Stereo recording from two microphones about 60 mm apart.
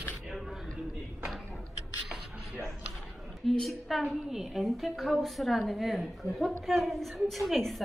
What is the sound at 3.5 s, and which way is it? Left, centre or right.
Speech, centre.